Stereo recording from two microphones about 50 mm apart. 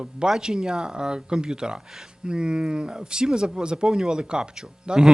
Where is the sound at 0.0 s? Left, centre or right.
Centre.